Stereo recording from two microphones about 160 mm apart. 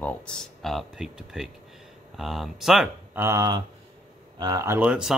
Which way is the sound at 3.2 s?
20° right (ahead or behind).